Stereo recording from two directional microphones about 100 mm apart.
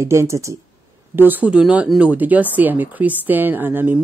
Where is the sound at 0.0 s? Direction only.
25° right (ahead or behind).